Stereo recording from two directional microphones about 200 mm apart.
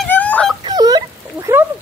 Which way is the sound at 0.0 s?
5° left (ahead or behind).